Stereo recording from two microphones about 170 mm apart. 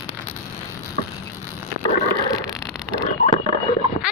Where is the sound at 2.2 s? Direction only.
20° left (ahead or behind).